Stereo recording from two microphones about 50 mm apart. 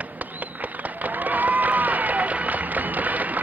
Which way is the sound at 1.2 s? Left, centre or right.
Right.